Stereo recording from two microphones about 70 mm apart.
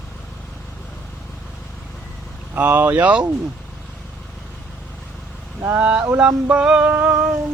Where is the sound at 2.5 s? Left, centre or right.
Right.